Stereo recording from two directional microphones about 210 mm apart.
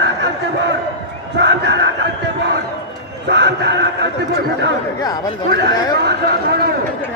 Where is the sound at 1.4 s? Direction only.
55° right (ahead or behind).